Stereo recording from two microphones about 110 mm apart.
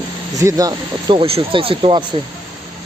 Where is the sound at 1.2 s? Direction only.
60° right (ahead or behind).